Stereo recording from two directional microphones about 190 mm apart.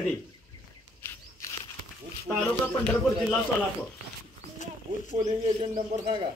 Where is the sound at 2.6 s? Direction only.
10° left (ahead or behind).